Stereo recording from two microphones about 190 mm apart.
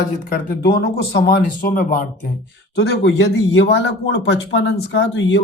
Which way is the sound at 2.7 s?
65° left (ahead or behind).